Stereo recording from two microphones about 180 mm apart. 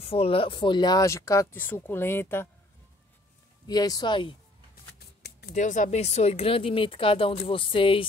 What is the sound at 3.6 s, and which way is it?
Speech, 20° left (ahead or behind).